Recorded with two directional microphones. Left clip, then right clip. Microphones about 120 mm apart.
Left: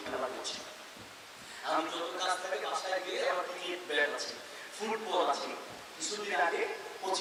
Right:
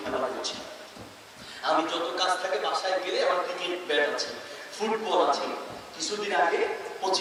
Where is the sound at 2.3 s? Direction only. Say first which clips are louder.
Right 7 dB; 20° right (ahead or behind).